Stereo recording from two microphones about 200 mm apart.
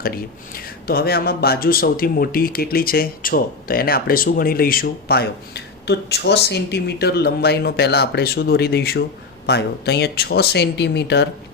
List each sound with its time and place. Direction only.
0.0 s speech: 50° left (ahead or behind)